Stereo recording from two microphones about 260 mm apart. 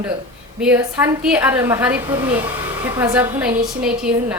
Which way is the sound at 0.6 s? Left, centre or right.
Centre.